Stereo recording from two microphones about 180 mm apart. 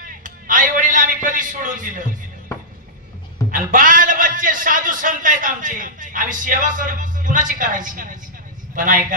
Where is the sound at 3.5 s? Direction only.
50° right (ahead or behind).